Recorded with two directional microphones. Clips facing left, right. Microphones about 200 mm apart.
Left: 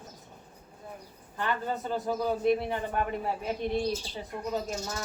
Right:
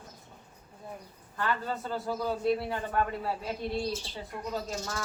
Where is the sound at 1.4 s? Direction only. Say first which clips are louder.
Left 1 dB; 20° left (ahead or behind).